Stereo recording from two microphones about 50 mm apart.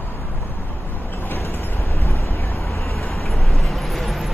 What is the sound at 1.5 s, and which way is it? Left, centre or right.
Wind noise, left.